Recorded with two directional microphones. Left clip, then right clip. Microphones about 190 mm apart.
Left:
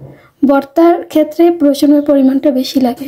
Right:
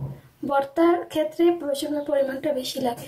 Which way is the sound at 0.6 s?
50° left (ahead or behind).